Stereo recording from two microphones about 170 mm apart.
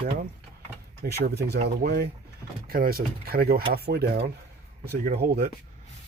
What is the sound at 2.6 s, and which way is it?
Speech, 60° right (ahead or behind).